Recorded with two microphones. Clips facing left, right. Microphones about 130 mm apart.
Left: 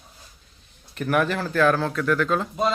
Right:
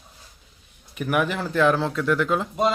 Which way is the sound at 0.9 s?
10° right (ahead or behind).